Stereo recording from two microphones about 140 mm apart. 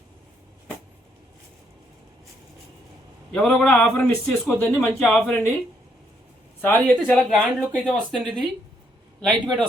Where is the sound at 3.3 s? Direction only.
5° left (ahead or behind).